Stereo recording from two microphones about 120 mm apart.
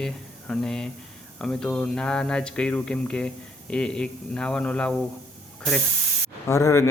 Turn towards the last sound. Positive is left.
turn(degrees=25)  # may be behind; listen again after turning